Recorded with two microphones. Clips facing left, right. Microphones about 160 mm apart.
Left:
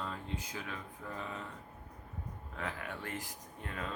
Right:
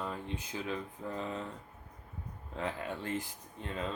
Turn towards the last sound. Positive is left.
turn(degrees=-25)  # may be behind; listen again after turning